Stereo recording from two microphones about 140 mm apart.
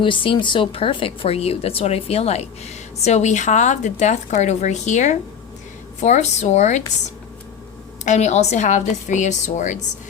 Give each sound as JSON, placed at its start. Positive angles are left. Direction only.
{"t": 0.0, "sound": "a woman's voice", "side_deg": 40}
{"t": 8.0, "sound": "a woman's voice", "side_deg": 55}